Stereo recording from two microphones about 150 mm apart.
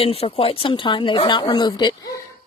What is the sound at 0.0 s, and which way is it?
A woman's voice, 40° left (ahead or behind).